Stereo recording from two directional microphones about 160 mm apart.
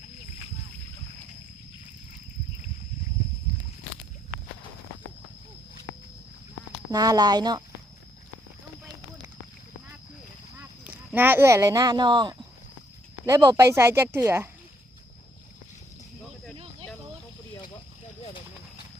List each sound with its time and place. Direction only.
6.9 s speech: 25° right (ahead or behind)
10.6 s speech: 10° right (ahead or behind)